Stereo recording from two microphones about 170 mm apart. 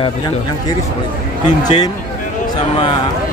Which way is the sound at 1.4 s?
25° left (ahead or behind).